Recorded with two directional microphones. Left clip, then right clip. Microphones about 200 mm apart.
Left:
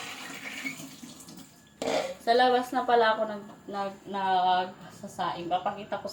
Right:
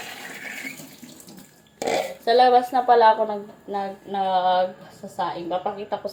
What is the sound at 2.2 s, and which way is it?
Speech, 5° left (ahead or behind).